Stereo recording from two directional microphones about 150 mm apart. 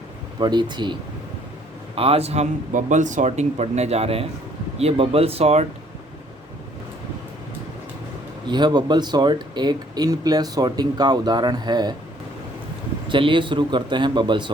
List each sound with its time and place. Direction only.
0.3 s speech: 30° right (ahead or behind)
2.0 s speech: 40° right (ahead or behind)
8.4 s speech: 30° right (ahead or behind)
13.1 s a man's voice: 35° right (ahead or behind)